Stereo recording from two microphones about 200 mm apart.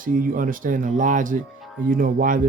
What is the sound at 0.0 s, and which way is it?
Speech, 45° right (ahead or behind).